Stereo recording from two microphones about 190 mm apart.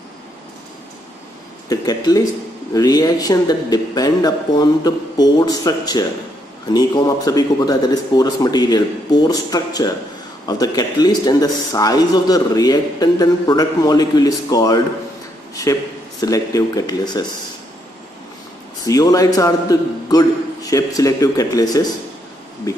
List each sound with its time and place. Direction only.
1.7 s a man's voice: 20° left (ahead or behind)
16.2 s a man's voice: 20° left (ahead or behind)
18.9 s a man's voice: 20° left (ahead or behind)